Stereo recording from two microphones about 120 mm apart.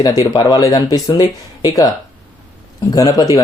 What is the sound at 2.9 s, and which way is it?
Speech, 30° left (ahead or behind).